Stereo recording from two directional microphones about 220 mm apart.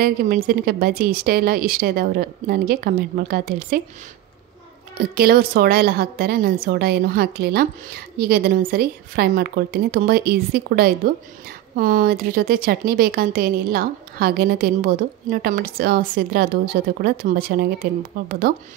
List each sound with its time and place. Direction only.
0.0 s a woman's voice: 40° right (ahead or behind)
4.9 s a woman's voice: 45° right (ahead or behind)